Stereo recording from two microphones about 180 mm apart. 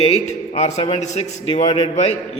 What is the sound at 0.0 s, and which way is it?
A man's voice, 35° left (ahead or behind).